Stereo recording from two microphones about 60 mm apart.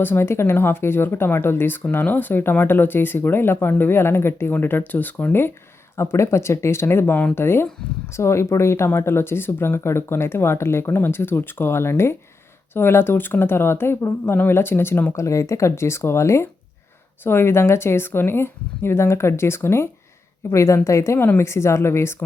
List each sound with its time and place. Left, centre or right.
0.0 s speech: left
0.3 s speech: left
6.0 s speech: left
8.1 s speech: left
15.1 s speech: left
17.2 s speech: left
20.5 s a woman's voice: left